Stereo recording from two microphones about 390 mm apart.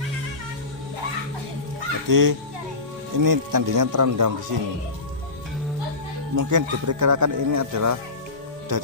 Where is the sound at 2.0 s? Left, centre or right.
Right.